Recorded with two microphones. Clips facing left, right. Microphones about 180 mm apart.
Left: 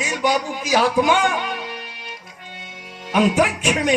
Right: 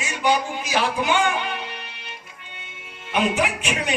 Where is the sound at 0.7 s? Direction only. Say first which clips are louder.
Left 6 dB; 40° left (ahead or behind).